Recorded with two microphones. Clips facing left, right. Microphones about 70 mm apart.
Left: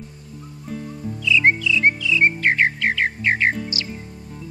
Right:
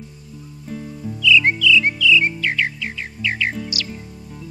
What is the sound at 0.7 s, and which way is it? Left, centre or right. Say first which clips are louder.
Music: even; centre.